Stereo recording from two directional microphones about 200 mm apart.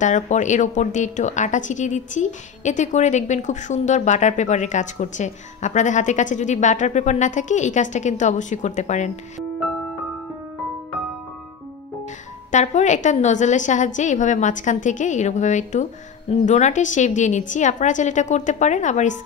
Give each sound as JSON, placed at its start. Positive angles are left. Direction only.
{"t": 0.0, "sound": "a woman's voice", "side_deg": 40}
{"t": 12.4, "sound": "a woman's voice", "side_deg": 35}